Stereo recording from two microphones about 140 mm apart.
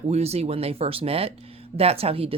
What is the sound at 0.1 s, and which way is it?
Speech, 50° right (ahead or behind).